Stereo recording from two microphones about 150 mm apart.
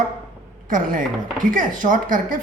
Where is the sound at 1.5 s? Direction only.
60° right (ahead or behind).